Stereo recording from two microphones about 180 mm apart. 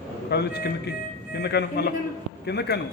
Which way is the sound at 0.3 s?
65° left (ahead or behind).